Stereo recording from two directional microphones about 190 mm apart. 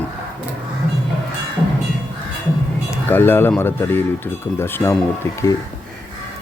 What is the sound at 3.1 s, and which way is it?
A man's voice, 10° left (ahead or behind).